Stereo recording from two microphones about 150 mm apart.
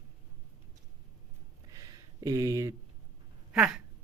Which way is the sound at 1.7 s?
25° right (ahead or behind).